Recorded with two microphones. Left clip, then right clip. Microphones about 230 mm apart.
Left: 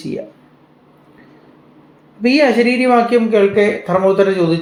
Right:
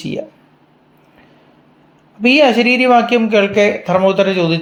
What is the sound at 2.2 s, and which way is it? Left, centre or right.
Speech, right.